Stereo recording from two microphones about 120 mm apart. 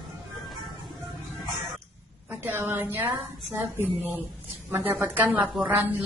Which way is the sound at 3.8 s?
15° right (ahead or behind).